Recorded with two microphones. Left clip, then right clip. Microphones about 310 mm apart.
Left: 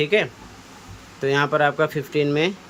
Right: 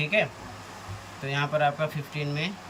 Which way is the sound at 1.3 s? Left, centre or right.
Centre.